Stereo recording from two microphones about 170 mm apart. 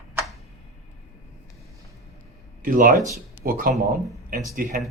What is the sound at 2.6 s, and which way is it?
Speech, 55° right (ahead or behind).